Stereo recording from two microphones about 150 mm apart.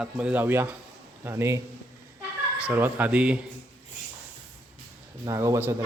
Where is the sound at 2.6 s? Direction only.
10° right (ahead or behind).